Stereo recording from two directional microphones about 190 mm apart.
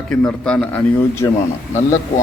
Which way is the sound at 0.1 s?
5° left (ahead or behind).